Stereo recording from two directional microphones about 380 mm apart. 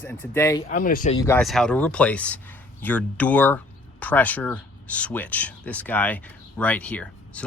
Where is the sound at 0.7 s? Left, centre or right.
Left.